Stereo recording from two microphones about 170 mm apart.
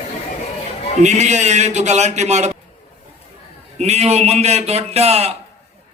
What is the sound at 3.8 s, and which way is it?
A man's voice, 40° right (ahead or behind).